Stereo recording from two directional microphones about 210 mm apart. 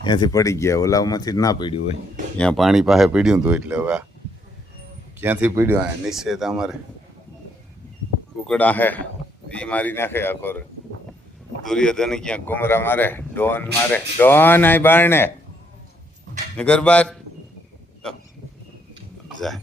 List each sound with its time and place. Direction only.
0.0 s speech: 20° left (ahead or behind)
2.4 s speech: centre (ahead or behind)
5.2 s speech: 10° right (ahead or behind)
8.4 s speech: 5° left (ahead or behind)
11.6 s speech: 5° left (ahead or behind)
16.6 s speech: 5° left (ahead or behind)
19.4 s speech: centre (ahead or behind)